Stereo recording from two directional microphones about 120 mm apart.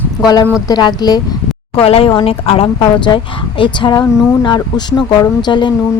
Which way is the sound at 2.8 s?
40° left (ahead or behind).